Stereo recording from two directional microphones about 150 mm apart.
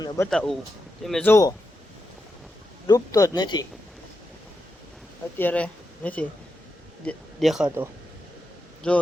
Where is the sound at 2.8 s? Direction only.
25° left (ahead or behind).